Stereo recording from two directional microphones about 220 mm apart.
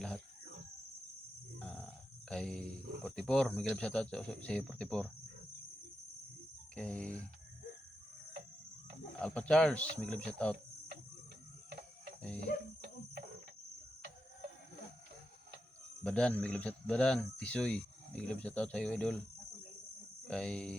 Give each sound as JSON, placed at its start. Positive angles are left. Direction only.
{"t": 1.5, "sound": "a sound", "side_deg": 5}
{"t": 2.3, "sound": "speech", "side_deg": 5}
{"t": 6.7, "sound": "speech", "side_deg": 5}
{"t": 9.1, "sound": "speech", "side_deg": 5}
{"t": 12.4, "sound": "cricket", "side_deg": -45}
{"t": 16.0, "sound": "speech", "side_deg": 5}
{"t": 20.2, "sound": "speech", "side_deg": 5}